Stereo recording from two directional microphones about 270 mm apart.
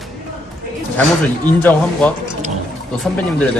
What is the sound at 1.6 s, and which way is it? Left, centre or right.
Speech, centre.